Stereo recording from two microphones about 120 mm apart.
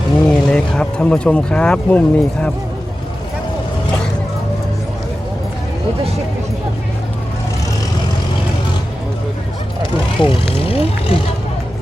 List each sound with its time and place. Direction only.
0.3 s speech: 5° left (ahead or behind)
10.2 s vehicle: 50° left (ahead or behind)